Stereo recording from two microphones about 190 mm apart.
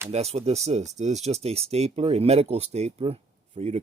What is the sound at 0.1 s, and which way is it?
Speech, 35° right (ahead or behind).